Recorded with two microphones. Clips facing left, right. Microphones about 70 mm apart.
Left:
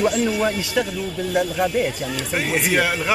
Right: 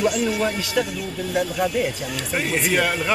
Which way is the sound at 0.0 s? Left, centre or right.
Left.